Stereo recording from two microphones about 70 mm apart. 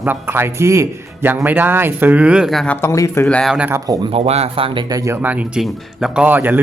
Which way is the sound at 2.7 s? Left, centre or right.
Left.